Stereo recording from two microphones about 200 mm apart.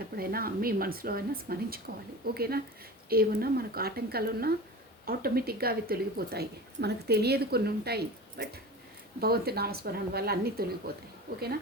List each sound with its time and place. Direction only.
0.2 s a woman's voice: 50° right (ahead or behind)